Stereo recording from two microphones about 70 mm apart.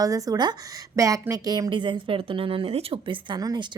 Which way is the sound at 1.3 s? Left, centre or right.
Right.